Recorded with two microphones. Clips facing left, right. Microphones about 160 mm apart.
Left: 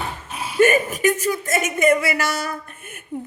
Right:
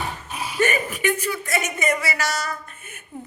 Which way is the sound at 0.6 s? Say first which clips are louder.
Left 6 dB; 45° left (ahead or behind).